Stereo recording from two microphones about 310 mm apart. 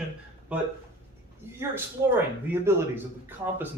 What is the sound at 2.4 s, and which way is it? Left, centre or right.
Speech, centre.